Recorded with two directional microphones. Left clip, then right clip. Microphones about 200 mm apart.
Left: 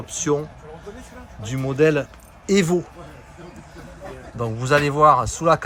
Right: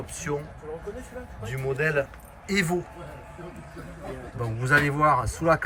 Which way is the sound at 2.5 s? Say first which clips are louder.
Left 7 dB; 15° left (ahead or behind).